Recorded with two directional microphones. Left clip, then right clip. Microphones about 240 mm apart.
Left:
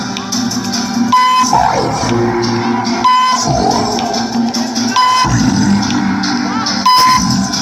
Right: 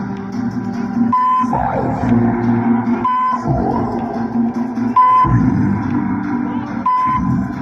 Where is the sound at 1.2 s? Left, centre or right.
Left.